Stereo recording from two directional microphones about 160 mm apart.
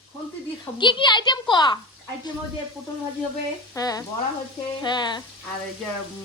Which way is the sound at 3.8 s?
20° left (ahead or behind).